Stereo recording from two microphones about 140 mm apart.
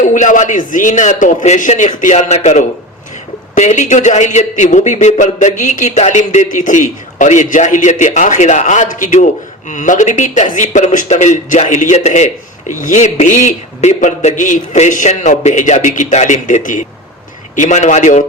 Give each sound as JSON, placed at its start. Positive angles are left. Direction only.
{"t": 0.0, "sound": "a man's voice", "side_deg": 65}